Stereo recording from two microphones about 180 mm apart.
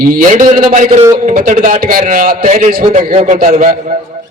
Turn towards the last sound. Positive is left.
turn(degrees=-40)  # may be behind; listen again after turning